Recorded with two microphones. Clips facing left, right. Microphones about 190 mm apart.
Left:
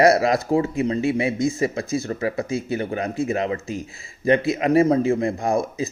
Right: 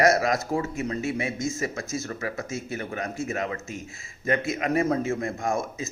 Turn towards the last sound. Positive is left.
turn(degrees=30)  # may be behind; listen again after turning